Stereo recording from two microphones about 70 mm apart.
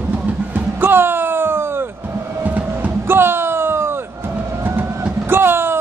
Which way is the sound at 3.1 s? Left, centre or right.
Right.